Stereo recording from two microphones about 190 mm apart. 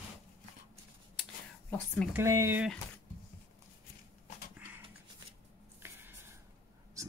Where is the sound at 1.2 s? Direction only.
5° left (ahead or behind).